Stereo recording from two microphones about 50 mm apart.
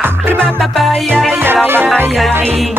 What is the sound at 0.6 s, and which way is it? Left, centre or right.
Music, centre.